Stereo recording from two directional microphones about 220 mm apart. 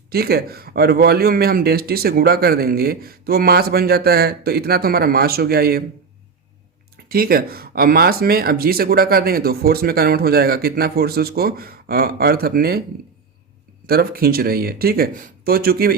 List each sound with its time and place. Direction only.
0.1 s speech: 45° right (ahead or behind)
6.9 s speech: 45° right (ahead or behind)
13.8 s speech: 45° right (ahead or behind)